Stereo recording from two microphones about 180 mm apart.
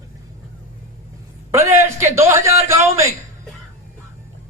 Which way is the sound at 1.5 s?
15° right (ahead or behind).